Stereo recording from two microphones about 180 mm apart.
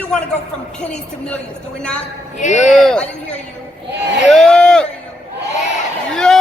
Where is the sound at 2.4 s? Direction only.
40° left (ahead or behind).